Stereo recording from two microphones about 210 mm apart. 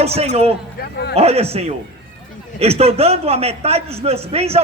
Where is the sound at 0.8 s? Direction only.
50° left (ahead or behind).